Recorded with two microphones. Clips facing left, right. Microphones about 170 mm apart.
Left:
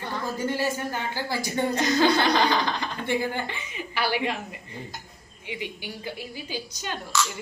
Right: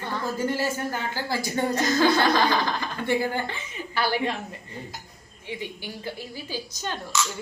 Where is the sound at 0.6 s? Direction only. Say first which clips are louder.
Even; 15° left (ahead or behind).